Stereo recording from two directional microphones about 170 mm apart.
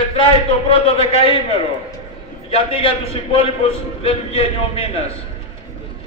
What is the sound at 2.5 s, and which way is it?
A man's voice, 35° left (ahead or behind).